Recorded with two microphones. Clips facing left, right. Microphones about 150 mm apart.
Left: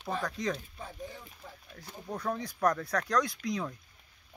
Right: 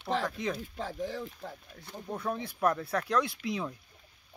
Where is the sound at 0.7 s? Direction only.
90° right.